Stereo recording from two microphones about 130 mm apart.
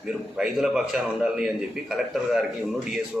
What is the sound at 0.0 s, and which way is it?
A man's voice, 5° right (ahead or behind).